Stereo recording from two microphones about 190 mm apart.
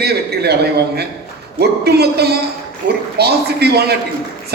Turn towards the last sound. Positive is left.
turn(degrees=-60)  # may be behind; listen again after turning